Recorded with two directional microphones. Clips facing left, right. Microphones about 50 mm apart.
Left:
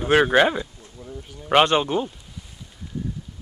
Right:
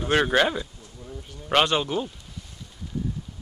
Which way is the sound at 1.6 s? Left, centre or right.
Left.